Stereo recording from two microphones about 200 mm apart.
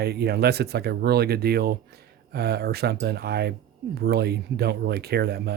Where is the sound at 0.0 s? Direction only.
55° right (ahead or behind).